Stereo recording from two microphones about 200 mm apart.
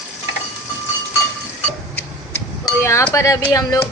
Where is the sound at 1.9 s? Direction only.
10° left (ahead or behind).